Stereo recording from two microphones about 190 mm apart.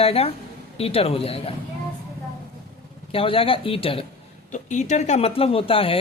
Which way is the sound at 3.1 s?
30° left (ahead or behind).